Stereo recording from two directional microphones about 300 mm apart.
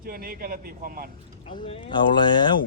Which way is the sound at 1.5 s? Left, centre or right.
Centre.